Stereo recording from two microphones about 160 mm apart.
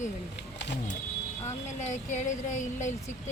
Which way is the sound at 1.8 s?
45° left (ahead or behind).